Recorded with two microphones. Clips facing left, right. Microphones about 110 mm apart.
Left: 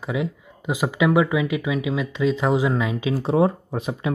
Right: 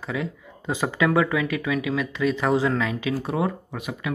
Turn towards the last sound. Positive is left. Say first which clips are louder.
# left 5 dB
turn(degrees=30)  # may be behind; listen again after turning